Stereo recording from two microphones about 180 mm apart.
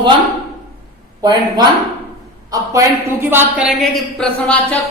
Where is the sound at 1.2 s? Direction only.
25° right (ahead or behind).